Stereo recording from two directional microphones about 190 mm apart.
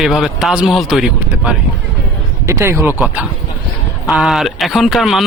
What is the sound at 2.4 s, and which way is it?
A man's voice, 15° right (ahead or behind).